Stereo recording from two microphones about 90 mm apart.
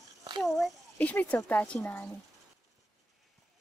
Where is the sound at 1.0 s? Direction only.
15° left (ahead or behind).